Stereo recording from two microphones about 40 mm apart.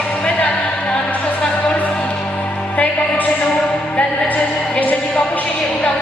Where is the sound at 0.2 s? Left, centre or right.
Left.